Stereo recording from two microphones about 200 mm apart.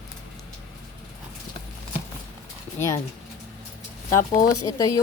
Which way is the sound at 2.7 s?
15° left (ahead or behind).